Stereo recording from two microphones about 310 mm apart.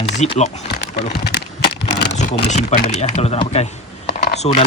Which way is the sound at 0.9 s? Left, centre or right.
Left.